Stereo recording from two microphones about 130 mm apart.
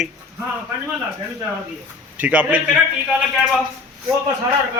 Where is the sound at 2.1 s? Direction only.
10° right (ahead or behind).